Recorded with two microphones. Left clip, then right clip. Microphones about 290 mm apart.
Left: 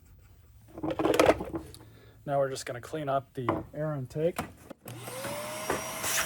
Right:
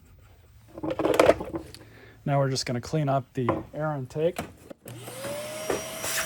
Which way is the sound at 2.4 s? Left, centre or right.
Right.